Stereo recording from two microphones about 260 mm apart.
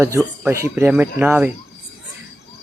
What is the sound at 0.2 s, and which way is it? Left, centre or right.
Speech, centre.